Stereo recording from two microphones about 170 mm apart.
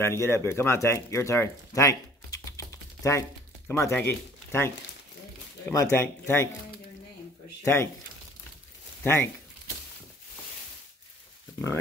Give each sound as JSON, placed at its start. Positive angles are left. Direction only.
{"t": 0.0, "sound": "speech", "side_deg": 15}
{"t": 7.6, "sound": "speech", "side_deg": 15}
{"t": 9.0, "sound": "speech", "side_deg": 15}